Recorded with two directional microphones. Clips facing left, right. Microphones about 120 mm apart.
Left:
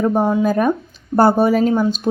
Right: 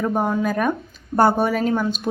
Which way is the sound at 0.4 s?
30° left (ahead or behind).